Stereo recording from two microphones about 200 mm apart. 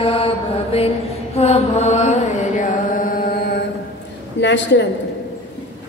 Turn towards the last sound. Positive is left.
turn(degrees=60)  # may be behind; listen again after turning